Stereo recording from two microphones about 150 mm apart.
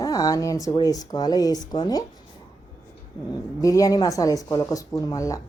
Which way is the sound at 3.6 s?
20° left (ahead or behind).